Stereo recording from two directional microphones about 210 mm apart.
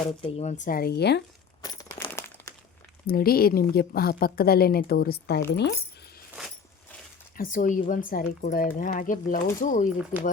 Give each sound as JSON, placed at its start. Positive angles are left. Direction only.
{"t": 0.2, "sound": "speech", "side_deg": 30}
{"t": 0.6, "sound": "a woman's voice", "side_deg": 45}
{"t": 1.6, "sound": "crumpling", "side_deg": 20}
{"t": 3.1, "sound": "a woman's voice", "side_deg": 45}
{"t": 7.3, "sound": "speech", "side_deg": 40}